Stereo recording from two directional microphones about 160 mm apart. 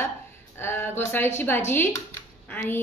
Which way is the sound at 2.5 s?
10° left (ahead or behind).